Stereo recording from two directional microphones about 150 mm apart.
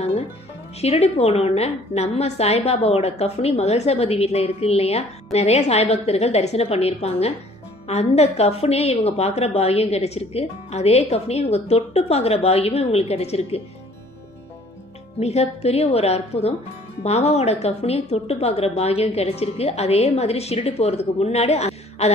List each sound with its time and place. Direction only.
0.7 s a woman's voice: 45° left (ahead or behind)
15.1 s a woman's voice: 45° left (ahead or behind)